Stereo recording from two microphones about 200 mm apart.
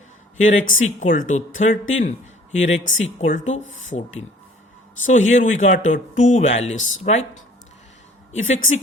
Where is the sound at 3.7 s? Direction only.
75° left (ahead or behind).